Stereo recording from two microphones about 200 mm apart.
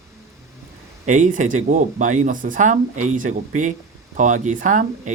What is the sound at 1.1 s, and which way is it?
Speech, 40° right (ahead or behind).